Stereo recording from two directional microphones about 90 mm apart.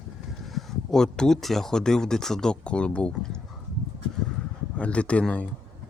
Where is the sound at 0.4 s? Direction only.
5° left (ahead or behind).